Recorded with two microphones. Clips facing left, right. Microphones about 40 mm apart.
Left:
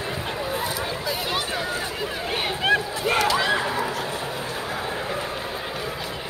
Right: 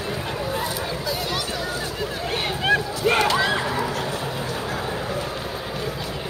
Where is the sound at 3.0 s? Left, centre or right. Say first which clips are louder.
Right 2 dB; right.